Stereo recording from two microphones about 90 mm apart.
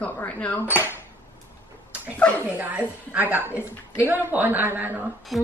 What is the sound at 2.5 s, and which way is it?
A woman's voice, 15° right (ahead or behind).